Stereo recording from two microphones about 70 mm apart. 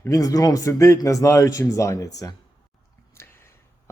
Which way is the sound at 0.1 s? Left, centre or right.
Left.